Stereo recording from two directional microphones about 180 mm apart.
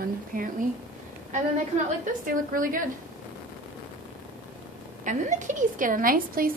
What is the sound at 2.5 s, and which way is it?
Speech, 50° right (ahead or behind).